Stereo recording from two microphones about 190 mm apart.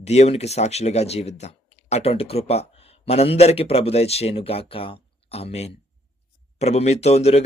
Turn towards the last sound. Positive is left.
turn(degrees=35)  # may be behind; listen again after turning